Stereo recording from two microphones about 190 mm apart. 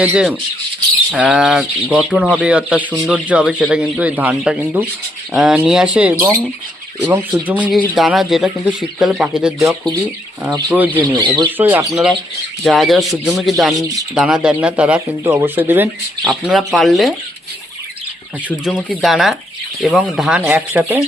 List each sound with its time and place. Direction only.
0.0 s speech: 5° right (ahead or behind)
10.9 s speech: 20° right (ahead or behind)
11.5 s speech: 10° right (ahead or behind)
18.4 s speech: centre (ahead or behind)